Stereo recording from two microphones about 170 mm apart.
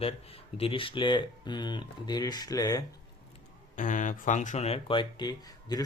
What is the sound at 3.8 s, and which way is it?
Speech, 50° left (ahead or behind).